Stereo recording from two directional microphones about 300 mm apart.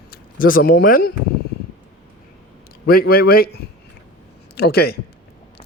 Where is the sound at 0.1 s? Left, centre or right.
Left.